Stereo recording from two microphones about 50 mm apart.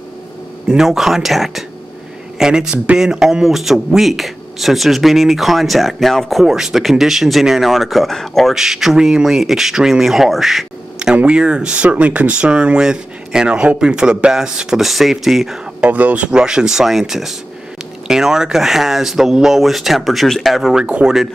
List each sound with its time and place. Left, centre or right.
0.7 s speech: centre
2.3 s speech: centre
6.4 s speech: centre
8.5 s speech: centre
11.2 s speech: centre
15.8 s speech: right
16.3 s speech: centre
20.5 s speech: centre
20.8 s speech: right